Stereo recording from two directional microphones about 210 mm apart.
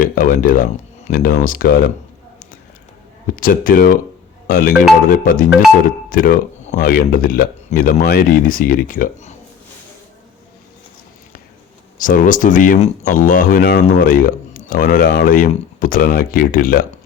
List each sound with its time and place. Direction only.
0.0 s speech: 40° left (ahead or behind)
3.3 s speech: 40° left (ahead or behind)
11.9 s speech: 40° left (ahead or behind)